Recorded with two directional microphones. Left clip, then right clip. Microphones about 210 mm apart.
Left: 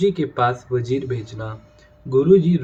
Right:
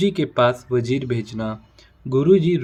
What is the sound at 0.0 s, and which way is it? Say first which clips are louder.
Speech: right 1 dB; 55° right (ahead or behind).